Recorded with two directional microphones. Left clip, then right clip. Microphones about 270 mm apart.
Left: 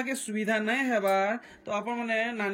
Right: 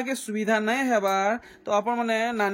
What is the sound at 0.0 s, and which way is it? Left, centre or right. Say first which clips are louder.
Speech: right 3 dB; centre.